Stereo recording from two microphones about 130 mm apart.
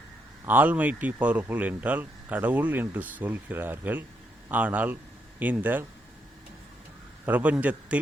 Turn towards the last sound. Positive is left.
turn(degrees=-10)  # may be behind; listen again after turning